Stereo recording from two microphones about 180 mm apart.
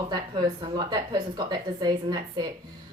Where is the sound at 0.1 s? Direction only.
20° right (ahead or behind).